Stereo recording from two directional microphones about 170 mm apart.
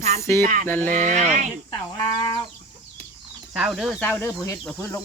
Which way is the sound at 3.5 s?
5° right (ahead or behind).